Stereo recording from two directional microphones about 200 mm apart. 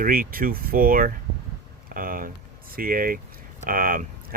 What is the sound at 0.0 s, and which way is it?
Speech, 45° right (ahead or behind).